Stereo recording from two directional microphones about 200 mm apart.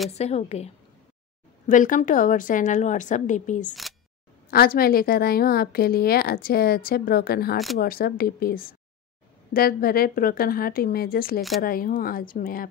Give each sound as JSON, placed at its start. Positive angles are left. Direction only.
{"t": 0.1, "sound": "a woman's voice", "side_deg": 30}
{"t": 1.7, "sound": "a woman's voice", "side_deg": 40}
{"t": 4.5, "sound": "a woman's voice", "side_deg": 50}